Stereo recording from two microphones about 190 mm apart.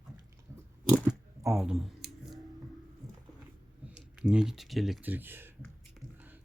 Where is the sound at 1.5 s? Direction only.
5° right (ahead or behind).